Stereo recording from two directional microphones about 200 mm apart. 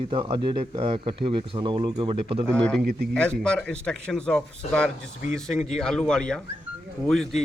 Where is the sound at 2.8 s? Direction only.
50° right (ahead or behind).